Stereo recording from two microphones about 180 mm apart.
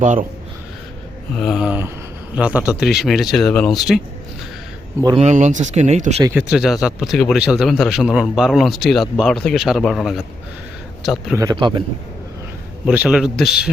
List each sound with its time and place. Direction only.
0.0 s speech: 45° right (ahead or behind)
1.4 s a man's voice: centre (ahead or behind)
5.1 s speech: 40° right (ahead or behind)
6.5 s a man's voice: 5° right (ahead or behind)
11.5 s a man's voice: 25° right (ahead or behind)
12.8 s a man's voice: 5° right (ahead or behind)